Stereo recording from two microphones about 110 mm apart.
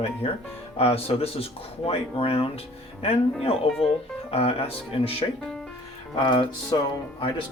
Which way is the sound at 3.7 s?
Centre (ahead or behind).